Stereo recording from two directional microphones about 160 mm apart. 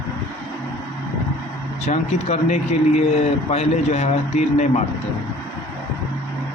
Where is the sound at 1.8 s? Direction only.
45° left (ahead or behind).